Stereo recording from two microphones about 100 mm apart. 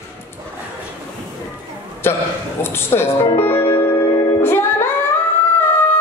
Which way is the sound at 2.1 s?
25° left (ahead or behind).